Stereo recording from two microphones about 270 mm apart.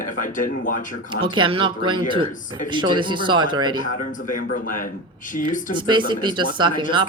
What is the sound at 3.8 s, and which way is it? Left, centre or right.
Speech, left.